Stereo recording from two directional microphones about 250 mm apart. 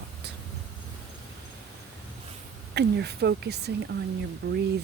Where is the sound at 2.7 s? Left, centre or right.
Right.